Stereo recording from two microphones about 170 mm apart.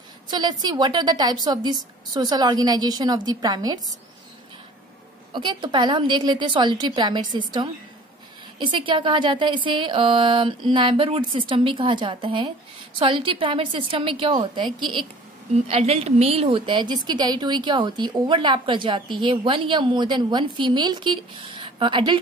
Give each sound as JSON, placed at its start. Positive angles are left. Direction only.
{"t": 0.3, "sound": "a woman's voice", "side_deg": -25}
{"t": 5.3, "sound": "a woman's voice", "side_deg": -30}